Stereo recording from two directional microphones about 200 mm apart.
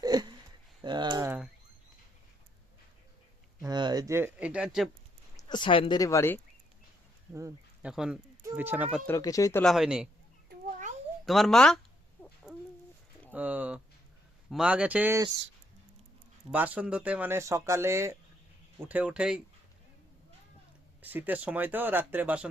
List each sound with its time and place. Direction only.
0.0 s a sound: 20° right (ahead or behind)
3.6 s a sound: 20° right (ahead or behind); by 4.9 s 5° right (ahead or behind)
5.4 s speech: 20° left (ahead or behind)
7.3 s speech: 15° right (ahead or behind)
7.9 s speech: 5° right (ahead or behind)
9.0 s speech: 15° left (ahead or behind)
9.6 s speech: centre (ahead or behind)
11.3 s speech: centre (ahead or behind)
12.2 s chicken: 10° left (ahead or behind)
13.3 s speech: 10° right (ahead or behind)
16.5 s speech: 5° right (ahead or behind)
21.0 s speech: 10° right (ahead or behind)